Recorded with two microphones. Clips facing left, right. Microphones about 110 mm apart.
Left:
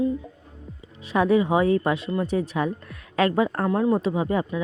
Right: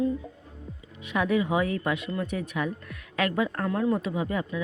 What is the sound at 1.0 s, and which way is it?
Speech, 35° left (ahead or behind).